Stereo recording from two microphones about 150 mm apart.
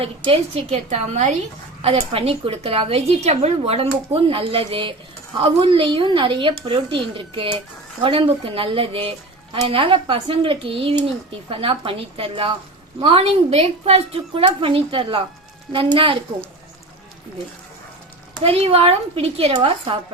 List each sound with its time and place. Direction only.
0.0 s a woman's voice: 40° right (ahead or behind)
1.8 s a woman's voice: 40° right (ahead or behind)
18.3 s a woman's voice: 40° right (ahead or behind)